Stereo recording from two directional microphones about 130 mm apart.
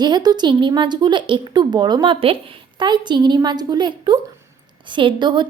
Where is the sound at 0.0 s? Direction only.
30° right (ahead or behind).